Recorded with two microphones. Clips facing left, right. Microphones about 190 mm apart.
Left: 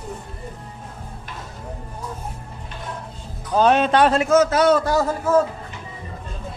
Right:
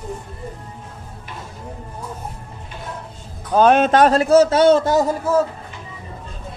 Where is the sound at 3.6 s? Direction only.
50° right (ahead or behind); by 5.1 s 20° right (ahead or behind).